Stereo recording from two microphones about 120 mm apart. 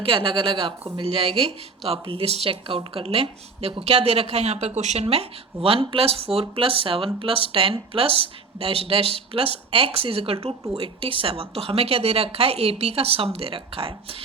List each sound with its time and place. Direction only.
0.0 s a woman's voice: 50° right (ahead or behind)
4.8 s speech: 75° right (ahead or behind)
5.0 s a woman's voice: 50° right (ahead or behind)